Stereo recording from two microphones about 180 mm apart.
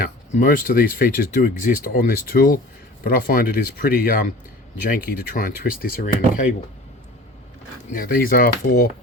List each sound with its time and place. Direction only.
0.3 s speech: 50° left (ahead or behind)
7.9 s speech: 55° left (ahead or behind)